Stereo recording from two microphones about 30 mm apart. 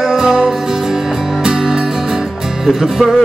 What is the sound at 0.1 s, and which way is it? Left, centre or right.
Music, centre.